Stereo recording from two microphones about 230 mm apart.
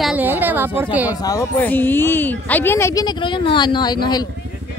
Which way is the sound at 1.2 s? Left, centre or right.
Centre.